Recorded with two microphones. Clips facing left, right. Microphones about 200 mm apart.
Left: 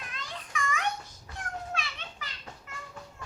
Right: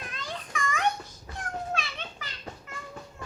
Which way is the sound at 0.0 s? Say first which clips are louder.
Right 4 dB; 35° right (ahead or behind).